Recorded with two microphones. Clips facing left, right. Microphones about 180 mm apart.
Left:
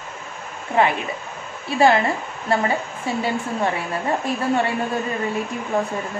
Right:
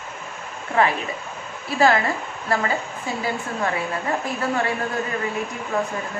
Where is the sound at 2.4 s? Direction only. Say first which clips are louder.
Left 3 dB; 25° left (ahead or behind).